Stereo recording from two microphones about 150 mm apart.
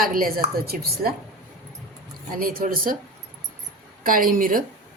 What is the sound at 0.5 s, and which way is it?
Speech, 90° right.